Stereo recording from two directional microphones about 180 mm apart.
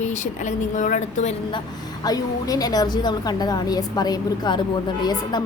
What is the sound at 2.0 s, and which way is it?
A woman's voice, 20° left (ahead or behind).